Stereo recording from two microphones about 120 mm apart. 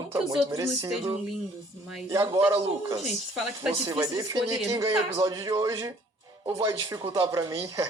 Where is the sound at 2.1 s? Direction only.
25° right (ahead or behind).